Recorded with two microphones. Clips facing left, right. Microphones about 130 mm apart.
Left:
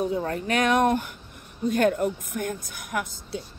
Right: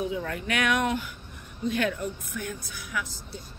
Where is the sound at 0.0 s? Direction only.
40° left (ahead or behind).